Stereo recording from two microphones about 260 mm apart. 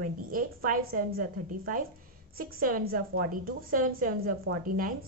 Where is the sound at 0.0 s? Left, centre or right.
Right.